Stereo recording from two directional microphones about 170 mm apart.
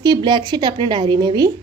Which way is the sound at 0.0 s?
25° right (ahead or behind).